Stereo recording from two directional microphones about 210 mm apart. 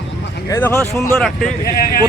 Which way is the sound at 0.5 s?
10° left (ahead or behind).